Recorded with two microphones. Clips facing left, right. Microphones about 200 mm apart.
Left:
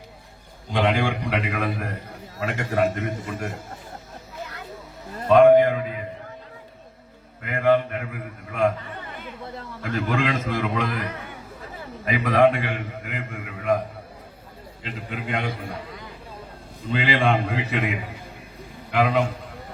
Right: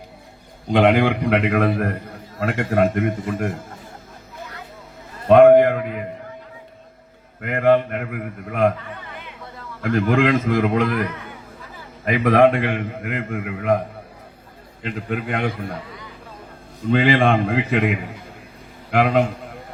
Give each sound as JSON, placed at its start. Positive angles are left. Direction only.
{"t": 0.7, "sound": "a man's voice", "side_deg": -55}
{"t": 5.3, "sound": "a sound", "side_deg": -55}
{"t": 7.4, "sound": "a man's voice", "side_deg": -55}
{"t": 9.1, "sound": "a sound", "side_deg": 45}
{"t": 9.8, "sound": "a man's voice", "side_deg": -55}
{"t": 12.0, "sound": "a man's voice", "side_deg": -55}
{"t": 16.8, "sound": "a man's voice", "side_deg": -55}
{"t": 18.9, "sound": "a man's voice", "side_deg": -50}